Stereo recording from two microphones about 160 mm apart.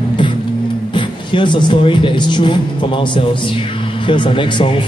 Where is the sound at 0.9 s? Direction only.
30° left (ahead or behind).